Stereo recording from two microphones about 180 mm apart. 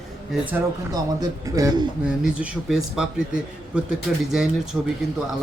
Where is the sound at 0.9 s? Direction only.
20° right (ahead or behind).